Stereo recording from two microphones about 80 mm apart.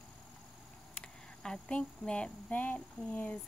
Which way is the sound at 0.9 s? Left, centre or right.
Centre.